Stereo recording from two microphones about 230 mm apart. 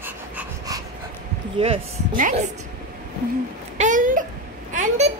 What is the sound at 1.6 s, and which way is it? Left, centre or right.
Speech, right.